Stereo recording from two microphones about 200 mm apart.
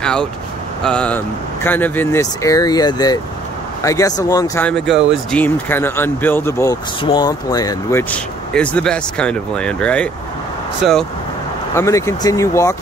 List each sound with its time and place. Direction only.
0.0 s speech: 5° left (ahead or behind)
4.6 s speech: centre (ahead or behind); by 8.0 s 20° left (ahead or behind)
8.1 s speech: 5° left (ahead or behind)
11.7 s speech: 15° left (ahead or behind)